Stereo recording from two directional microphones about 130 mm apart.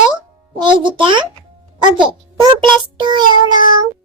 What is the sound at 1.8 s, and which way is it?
Speech, 35° right (ahead or behind).